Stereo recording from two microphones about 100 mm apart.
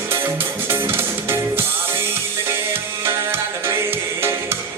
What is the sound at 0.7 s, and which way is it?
Music, 25° right (ahead or behind).